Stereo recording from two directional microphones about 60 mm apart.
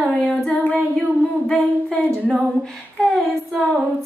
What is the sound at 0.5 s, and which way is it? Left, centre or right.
Humming, left.